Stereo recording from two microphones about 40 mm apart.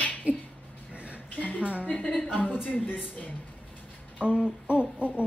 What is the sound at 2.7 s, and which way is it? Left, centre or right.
Child singing, left.